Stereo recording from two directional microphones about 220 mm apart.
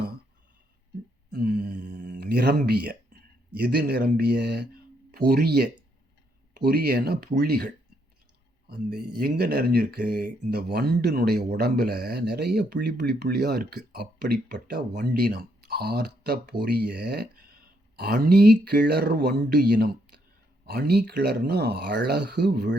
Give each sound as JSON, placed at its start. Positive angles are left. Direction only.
{"t": 1.3, "sound": "speech", "side_deg": -45}